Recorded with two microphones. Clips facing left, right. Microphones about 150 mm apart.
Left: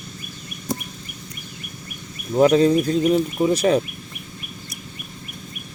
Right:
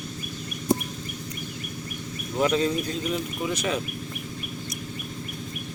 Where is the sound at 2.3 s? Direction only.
35° left (ahead or behind).